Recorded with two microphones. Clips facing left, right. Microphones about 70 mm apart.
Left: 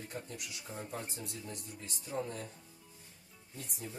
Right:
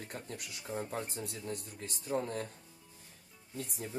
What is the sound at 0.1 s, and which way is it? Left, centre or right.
Speech, right.